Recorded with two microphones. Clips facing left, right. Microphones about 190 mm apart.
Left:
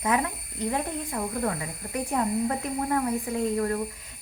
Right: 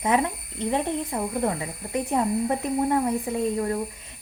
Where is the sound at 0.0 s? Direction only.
25° right (ahead or behind).